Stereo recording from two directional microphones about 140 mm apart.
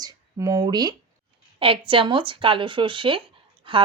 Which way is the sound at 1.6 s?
40° right (ahead or behind).